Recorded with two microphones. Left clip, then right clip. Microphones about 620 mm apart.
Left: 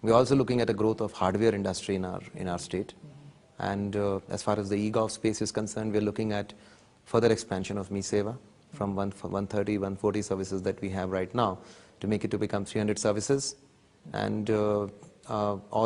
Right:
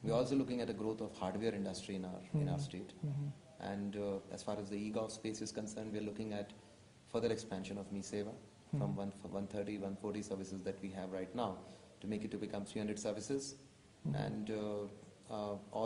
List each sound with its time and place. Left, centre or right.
0.0 s speech: left